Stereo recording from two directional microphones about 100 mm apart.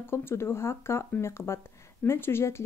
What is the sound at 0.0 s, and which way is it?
Speech, 25° left (ahead or behind).